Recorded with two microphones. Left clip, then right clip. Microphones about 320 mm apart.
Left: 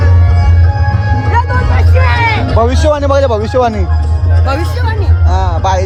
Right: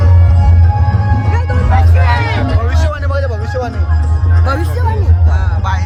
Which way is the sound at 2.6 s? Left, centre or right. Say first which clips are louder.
Left 9 dB; centre.